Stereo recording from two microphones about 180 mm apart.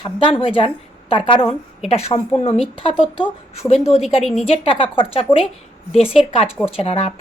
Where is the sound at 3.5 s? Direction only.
35° left (ahead or behind).